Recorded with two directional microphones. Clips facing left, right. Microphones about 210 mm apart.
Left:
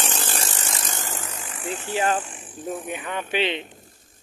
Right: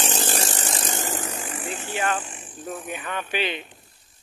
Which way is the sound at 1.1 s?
35° right (ahead or behind).